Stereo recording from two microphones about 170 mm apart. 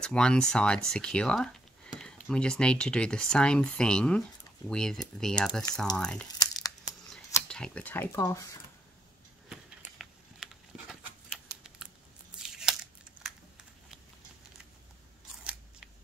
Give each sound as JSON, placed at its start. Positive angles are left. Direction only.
{"t": 0.0, "sound": "speech", "side_deg": 5}
{"t": 6.4, "sound": "tearing", "side_deg": 20}
{"t": 7.4, "sound": "speech", "side_deg": 5}
{"t": 9.5, "sound": "a sound", "side_deg": 0}